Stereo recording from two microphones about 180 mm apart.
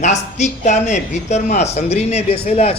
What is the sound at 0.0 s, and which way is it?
Speech, 40° left (ahead or behind).